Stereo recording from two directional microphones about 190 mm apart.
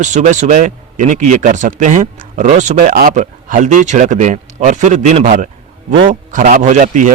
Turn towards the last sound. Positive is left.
turn(degrees=-40)  # may be behind; listen again after turning